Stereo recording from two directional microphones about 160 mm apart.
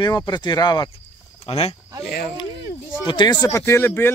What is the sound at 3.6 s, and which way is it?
Speech, 15° left (ahead or behind).